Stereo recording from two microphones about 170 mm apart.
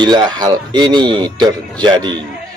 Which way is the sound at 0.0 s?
25° right (ahead or behind).